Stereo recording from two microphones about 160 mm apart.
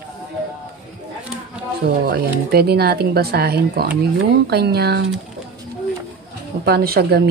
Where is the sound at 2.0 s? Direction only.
75° right (ahead or behind).